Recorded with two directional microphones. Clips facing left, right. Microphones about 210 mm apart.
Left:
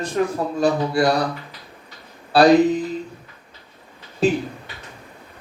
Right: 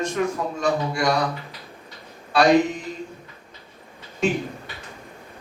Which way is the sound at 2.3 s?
35° left (ahead or behind).